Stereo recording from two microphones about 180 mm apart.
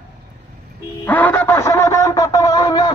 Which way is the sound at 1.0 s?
10° left (ahead or behind).